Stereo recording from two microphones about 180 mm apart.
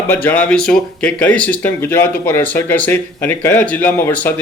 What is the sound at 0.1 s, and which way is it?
Speech, 10° left (ahead or behind).